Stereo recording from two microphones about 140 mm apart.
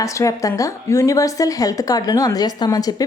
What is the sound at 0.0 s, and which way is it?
A woman's voice, 25° left (ahead or behind).